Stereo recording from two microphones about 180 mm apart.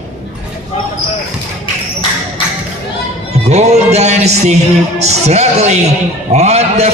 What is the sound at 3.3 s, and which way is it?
A man's voice, 35° right (ahead or behind).